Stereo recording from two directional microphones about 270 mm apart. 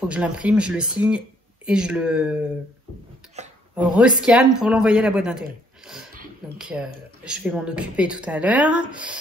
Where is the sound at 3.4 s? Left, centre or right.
Right.